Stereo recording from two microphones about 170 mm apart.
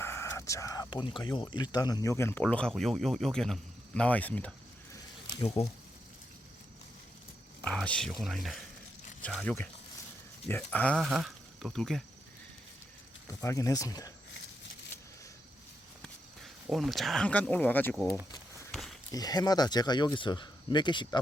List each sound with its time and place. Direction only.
0.0 s a sound: 15° left (ahead or behind)
1.2 s speech: 25° left (ahead or behind); by 4.5 s 10° left (ahead or behind)
5.6 s speech: 40° left (ahead or behind)
7.6 s speech: 5° left (ahead or behind)
13.2 s speech: 20° left (ahead or behind)
16.0 s speech: centre (ahead or behind)
18.7 s walk: centre (ahead or behind)
19.1 s speech: 25° left (ahead or behind)